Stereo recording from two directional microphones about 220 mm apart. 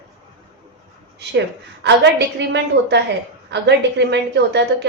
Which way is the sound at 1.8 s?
50° right (ahead or behind).